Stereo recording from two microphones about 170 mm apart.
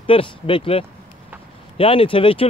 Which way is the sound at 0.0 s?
30° left (ahead or behind).